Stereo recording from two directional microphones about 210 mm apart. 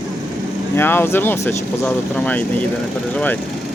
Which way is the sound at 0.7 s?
10° left (ahead or behind).